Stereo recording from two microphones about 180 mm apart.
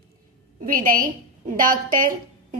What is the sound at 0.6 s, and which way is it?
A woman's voice, 50° right (ahead or behind).